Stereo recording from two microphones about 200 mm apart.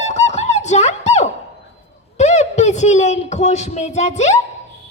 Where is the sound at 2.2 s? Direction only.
35° left (ahead or behind).